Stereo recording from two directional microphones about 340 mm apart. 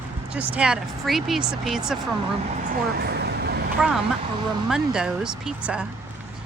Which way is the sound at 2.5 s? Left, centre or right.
Right.